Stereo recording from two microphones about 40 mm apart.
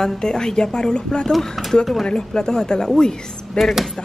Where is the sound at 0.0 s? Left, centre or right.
Centre.